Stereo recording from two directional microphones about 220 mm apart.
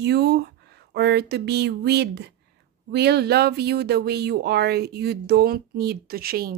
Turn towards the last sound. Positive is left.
turn(degrees=-45)  # may be behind; listen again after turning